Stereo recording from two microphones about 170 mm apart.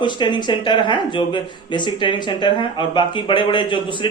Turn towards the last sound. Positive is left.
turn(degrees=30)  # may be behind; listen again after turning